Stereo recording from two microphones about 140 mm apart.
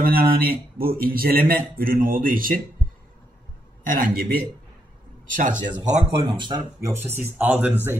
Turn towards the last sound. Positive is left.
turn(degrees=-15)  # may be behind; listen again after turning